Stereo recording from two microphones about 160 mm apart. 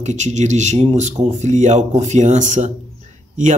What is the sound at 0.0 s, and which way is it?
Speech, 45° right (ahead or behind).